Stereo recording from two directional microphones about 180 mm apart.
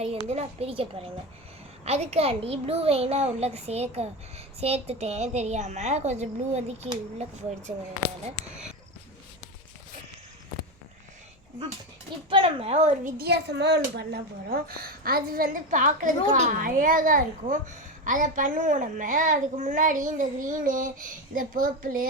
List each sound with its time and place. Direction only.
0.3 s a child's voice: 35° right (ahead or behind)
12.3 s a child's voice: 30° right (ahead or behind)
13.1 s a woman's voice: 65° right (ahead or behind); by 22.0 s 50° right (ahead or behind)